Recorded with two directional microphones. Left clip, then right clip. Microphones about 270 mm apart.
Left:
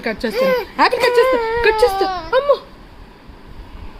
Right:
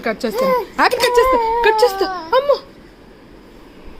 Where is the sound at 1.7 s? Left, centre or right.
Centre.